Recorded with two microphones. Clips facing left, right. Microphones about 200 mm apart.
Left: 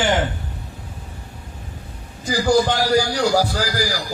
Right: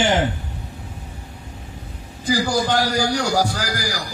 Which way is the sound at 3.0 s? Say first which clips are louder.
Left 2 dB; 45° right (ahead or behind).